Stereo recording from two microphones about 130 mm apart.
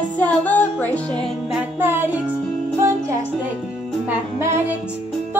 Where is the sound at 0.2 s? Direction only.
10° left (ahead or behind).